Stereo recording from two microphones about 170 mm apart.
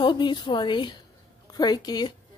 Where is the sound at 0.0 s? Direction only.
25° left (ahead or behind).